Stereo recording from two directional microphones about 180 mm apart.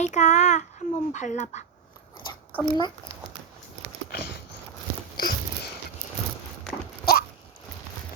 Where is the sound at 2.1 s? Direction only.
25° left (ahead or behind).